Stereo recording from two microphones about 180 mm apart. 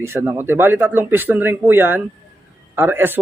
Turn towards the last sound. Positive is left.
turn(degrees=-10)  # may be behind; listen again after turning